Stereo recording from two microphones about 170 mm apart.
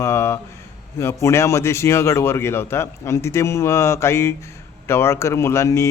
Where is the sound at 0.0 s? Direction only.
15° left (ahead or behind).